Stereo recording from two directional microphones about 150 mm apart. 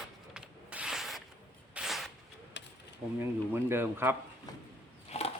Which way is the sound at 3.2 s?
15° right (ahead or behind).